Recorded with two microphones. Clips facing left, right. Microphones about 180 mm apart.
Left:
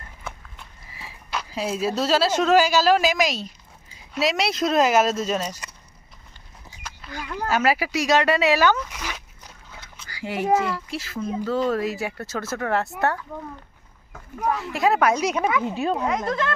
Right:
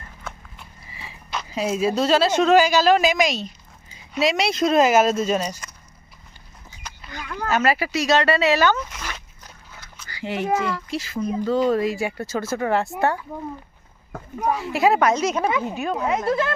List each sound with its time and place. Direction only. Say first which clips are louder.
0.9 s a sound: even; 5° left (ahead or behind)
2.0 s speech: right 2 dB; 5° left (ahead or behind)
6.8 s a sound: left 1 dB; 5° left (ahead or behind)
7.3 s speech: right 1 dB; 10° left (ahead or behind)
8.9 s dog: left 1 dB; 10° left (ahead or behind)
10.1 s a sound: even; 5° left (ahead or behind)
10.6 s speech: right 1 dB; 5° left (ahead or behind)
14.6 s speech: right 3 dB; centre (ahead or behind)
15.0 s speech: right 1 dB; 10° left (ahead or behind)
15.4 s speech: even; 20° right (ahead or behind)
15.7 s speech: left 2 dB; 30° left (ahead or behind)
16.0 s speech: right 3 dB; 5° right (ahead or behind)